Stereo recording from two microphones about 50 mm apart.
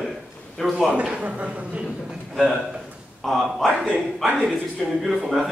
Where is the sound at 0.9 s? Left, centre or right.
Right.